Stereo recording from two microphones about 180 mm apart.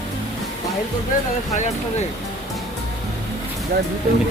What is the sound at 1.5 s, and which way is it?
Speech, 40° left (ahead or behind).